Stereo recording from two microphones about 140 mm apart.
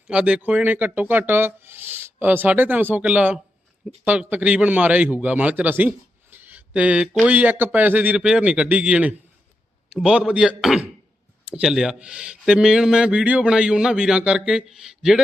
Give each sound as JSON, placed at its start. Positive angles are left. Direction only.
{"t": 0.1, "sound": "speech", "side_deg": -10}
{"t": 6.3, "sound": "a sound", "side_deg": -15}
{"t": 7.3, "sound": "speech", "side_deg": -10}